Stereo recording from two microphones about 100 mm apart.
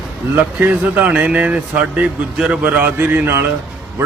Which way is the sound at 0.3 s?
15° right (ahead or behind).